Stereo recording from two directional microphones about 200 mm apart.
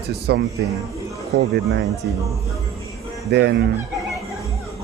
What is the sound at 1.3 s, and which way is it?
Speech, 60° right (ahead or behind).